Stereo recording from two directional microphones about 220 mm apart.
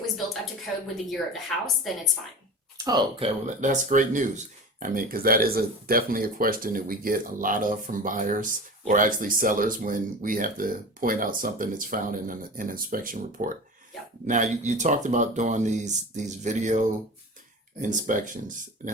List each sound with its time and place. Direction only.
1.1 s a woman's voice: centre (ahead or behind)
2.7 s speech: 20° right (ahead or behind); by 18.6 s 35° right (ahead or behind)